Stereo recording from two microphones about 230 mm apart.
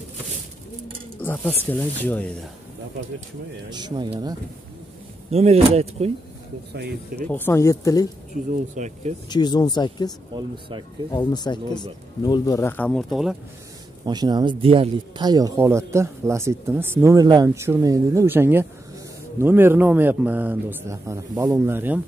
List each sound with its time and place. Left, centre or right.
1.2 s speech: centre
3.7 s speech: centre
7.2 s speech: centre
8.7 s speech: right
9.3 s speech: centre
14.0 s speech: centre